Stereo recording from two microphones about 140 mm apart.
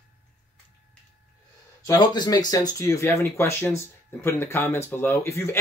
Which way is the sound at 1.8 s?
30° left (ahead or behind).